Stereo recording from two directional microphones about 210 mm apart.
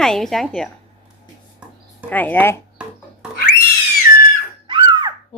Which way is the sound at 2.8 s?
5° right (ahead or behind).